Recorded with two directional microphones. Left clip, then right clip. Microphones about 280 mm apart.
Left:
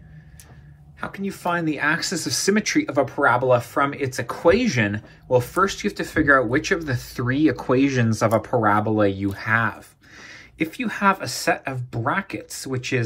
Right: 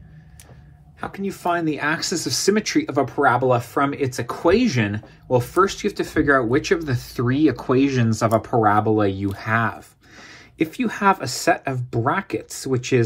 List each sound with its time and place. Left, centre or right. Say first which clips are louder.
1.0 s speech: right 2 dB; right